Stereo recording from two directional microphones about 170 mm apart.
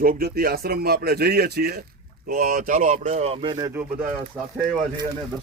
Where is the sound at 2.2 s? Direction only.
60° right (ahead or behind); by 3.7 s 30° right (ahead or behind).